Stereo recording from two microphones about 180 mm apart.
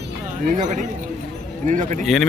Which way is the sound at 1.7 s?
45° right (ahead or behind).